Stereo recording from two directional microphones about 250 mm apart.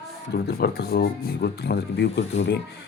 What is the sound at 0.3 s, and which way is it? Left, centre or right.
Speech, left.